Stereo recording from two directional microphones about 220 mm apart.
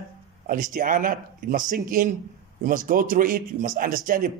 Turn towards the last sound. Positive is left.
turn(degrees=-40)  # may be behind; listen again after turning